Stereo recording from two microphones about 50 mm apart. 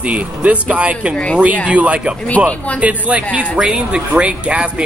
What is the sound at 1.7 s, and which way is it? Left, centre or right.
Speech, right.